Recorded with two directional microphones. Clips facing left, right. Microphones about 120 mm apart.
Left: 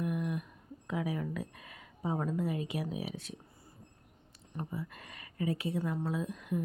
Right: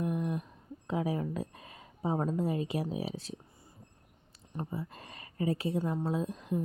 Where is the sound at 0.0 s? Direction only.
30° right (ahead or behind).